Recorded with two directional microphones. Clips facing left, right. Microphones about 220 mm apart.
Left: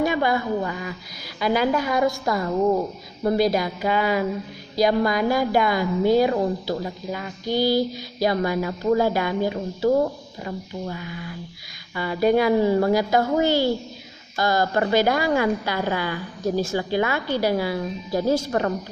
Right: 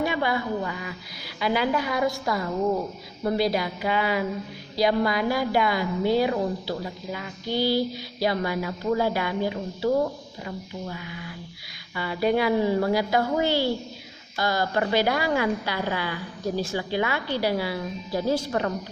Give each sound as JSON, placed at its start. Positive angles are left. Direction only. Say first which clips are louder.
{"t": 0.0, "sound": "a woman's voice", "louder": "left 4 dB", "side_deg": 45}
{"t": 11.9, "sound": "a woman's voice", "louder": "left 4 dB", "side_deg": 45}